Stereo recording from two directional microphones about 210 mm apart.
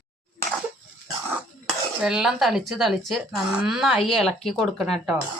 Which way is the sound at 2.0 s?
Centre (ahead or behind).